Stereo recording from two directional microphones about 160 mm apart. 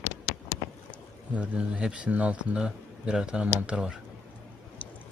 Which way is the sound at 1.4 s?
5° right (ahead or behind).